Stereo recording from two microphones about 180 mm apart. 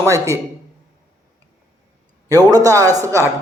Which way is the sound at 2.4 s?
20° right (ahead or behind).